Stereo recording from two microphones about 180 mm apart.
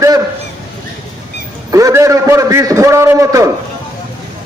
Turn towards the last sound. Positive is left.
turn(degrees=-15)  # may be behind; listen again after turning